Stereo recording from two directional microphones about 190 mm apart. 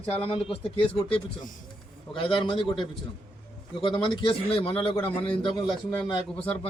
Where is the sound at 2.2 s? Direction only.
25° left (ahead or behind).